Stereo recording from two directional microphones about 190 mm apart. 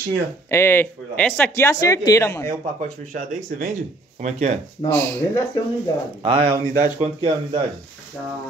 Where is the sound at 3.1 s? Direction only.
40° right (ahead or behind).